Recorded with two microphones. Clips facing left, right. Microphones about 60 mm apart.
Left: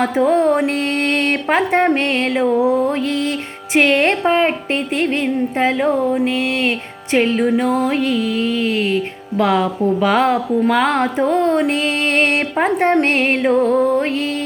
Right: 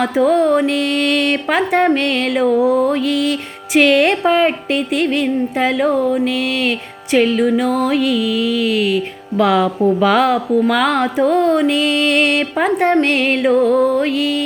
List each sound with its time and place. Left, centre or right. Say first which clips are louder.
0.2 s a woman's voice: right 1 dB; centre
0.6 s music: right 2 dB; left
2.3 s a woman's voice: right 3 dB; centre
2.6 s mantra: right 2 dB; centre
2.9 s music: right 3 dB; left
4.2 s a woman's voice: right 1 dB; centre
4.7 s music: right 2 dB; left
9.4 s a woman's voice: right 2 dB; centre
10.7 s music: left 2 dB; centre
11.0 s a woman's voice: right 2 dB; centre
11.6 s music: right 3 dB; left
13.4 s a woman's voice: right 3 dB; centre
14.0 s music: right 3 dB; left